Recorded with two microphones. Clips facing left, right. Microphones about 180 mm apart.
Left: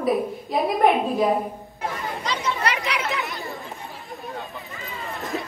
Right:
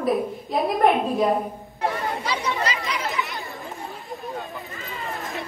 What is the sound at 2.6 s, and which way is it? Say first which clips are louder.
Speech: left 2 dB; 65° left (ahead or behind).